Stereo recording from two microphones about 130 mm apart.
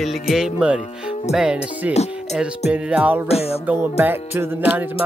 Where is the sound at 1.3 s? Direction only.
5° right (ahead or behind).